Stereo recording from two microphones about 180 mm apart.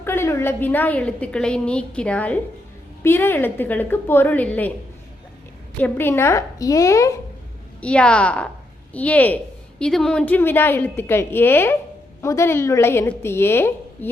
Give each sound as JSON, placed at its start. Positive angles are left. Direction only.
{"t": 0.0, "sound": "a woman's voice", "side_deg": 15}
{"t": 5.8, "sound": "a woman's voice", "side_deg": 10}
{"t": 7.8, "sound": "a woman's voice", "side_deg": 5}